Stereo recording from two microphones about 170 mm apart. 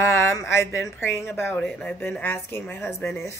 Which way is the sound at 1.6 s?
5° left (ahead or behind).